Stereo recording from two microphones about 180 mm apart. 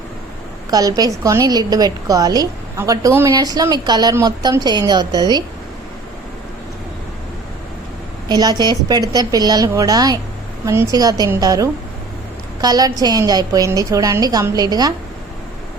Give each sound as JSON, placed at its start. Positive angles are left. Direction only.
{"t": 0.7, "sound": "a woman's voice", "side_deg": -20}
{"t": 8.3, "sound": "a woman's voice", "side_deg": -20}